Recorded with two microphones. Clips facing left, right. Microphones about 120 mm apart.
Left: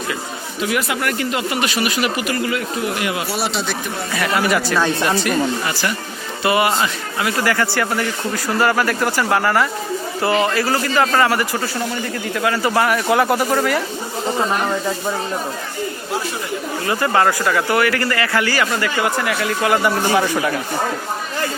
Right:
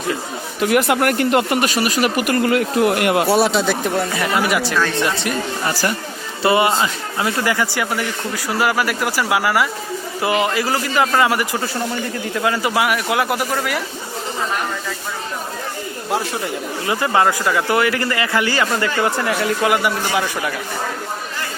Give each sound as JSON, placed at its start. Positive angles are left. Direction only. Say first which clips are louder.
{"t": 0.6, "sound": "speech", "louder": "right 5 dB", "side_deg": -55}
{"t": 4.2, "sound": "a man's voice", "louder": "left 5 dB", "side_deg": -15}
{"t": 5.6, "sound": "speech", "louder": "right 2 dB", "side_deg": -40}
{"t": 6.4, "sound": "speech", "louder": "right 1 dB", "side_deg": -30}
{"t": 7.5, "sound": "a man's voice", "louder": "left 1 dB", "side_deg": -15}
{"t": 12.7, "sound": "speech", "louder": "left 2 dB", "side_deg": -5}
{"t": 16.8, "sound": "speech", "louder": "even", "side_deg": -20}
{"t": 19.7, "sound": "a man's voice", "louder": "left 2 dB", "side_deg": -5}